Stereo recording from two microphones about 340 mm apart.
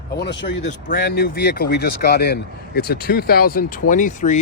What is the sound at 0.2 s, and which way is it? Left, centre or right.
Speech, left.